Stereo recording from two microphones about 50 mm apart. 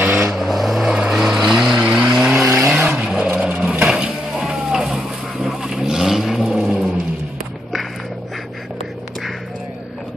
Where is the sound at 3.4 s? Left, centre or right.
Centre.